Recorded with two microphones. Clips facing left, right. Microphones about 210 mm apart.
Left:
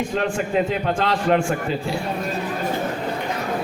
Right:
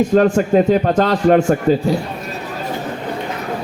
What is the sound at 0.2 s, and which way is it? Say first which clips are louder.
A man's voice: right 7 dB; 45° right (ahead or behind).